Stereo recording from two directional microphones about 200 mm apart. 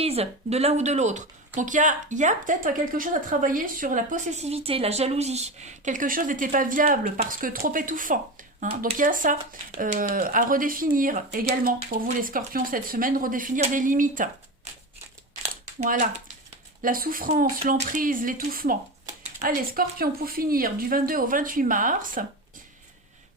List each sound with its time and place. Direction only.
0.0 s speech: 30° right (ahead or behind)
15.8 s speech: 40° right (ahead or behind)